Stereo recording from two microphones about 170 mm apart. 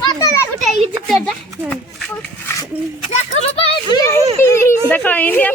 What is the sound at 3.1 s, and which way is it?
Speech, 35° left (ahead or behind).